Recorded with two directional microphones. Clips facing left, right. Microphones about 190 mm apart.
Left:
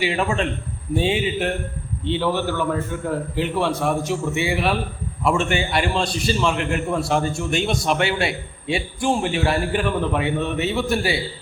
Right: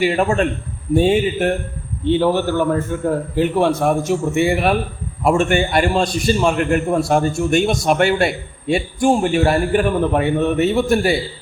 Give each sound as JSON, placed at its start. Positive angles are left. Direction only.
{"t": 0.0, "sound": "a man's voice", "side_deg": -45}